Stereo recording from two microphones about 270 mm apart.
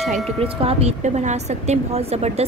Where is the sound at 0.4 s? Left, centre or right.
Right.